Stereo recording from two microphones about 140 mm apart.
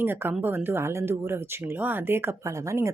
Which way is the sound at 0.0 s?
15° right (ahead or behind).